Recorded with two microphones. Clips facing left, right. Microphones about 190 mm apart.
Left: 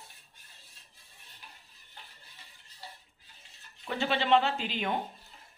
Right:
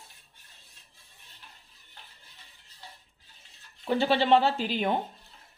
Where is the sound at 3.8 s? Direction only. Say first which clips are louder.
Right 5 dB; 35° right (ahead or behind).